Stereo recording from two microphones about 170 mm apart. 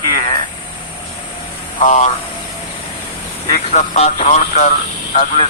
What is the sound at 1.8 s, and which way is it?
Speech, 45° left (ahead or behind).